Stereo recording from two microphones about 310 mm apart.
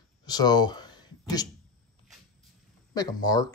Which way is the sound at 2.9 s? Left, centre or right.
Centre.